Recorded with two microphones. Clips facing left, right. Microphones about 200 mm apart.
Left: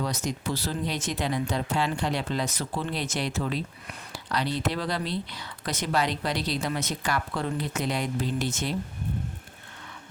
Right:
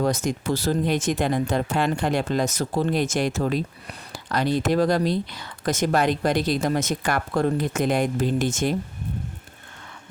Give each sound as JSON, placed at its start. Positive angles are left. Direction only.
{"t": 0.0, "sound": "speech", "side_deg": -50}